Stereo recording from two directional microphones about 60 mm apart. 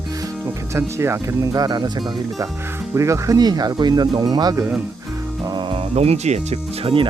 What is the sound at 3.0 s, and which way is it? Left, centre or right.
Speech, right.